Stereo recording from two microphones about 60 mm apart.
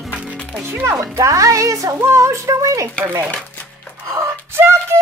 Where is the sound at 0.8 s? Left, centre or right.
Right.